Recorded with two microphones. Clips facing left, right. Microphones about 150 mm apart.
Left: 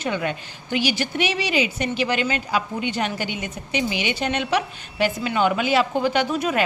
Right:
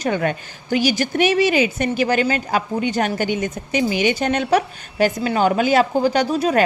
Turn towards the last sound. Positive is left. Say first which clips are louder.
# right 4 dB
turn(degrees=-35)  # may be behind; listen again after turning